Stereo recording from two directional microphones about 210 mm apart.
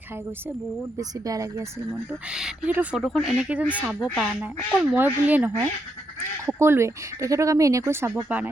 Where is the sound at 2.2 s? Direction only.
5° right (ahead or behind).